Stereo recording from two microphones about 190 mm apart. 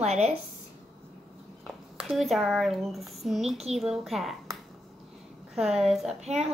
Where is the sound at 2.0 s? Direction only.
Centre (ahead or behind).